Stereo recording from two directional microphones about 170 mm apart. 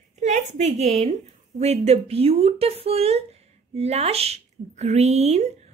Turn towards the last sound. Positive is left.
turn(degrees=-40)  # may be behind; listen again after turning